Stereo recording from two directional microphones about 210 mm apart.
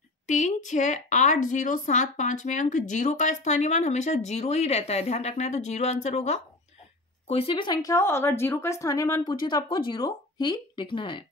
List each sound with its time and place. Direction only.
0.3 s a woman's voice: 35° left (ahead or behind)